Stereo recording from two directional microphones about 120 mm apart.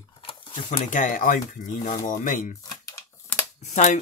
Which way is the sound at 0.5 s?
90° left.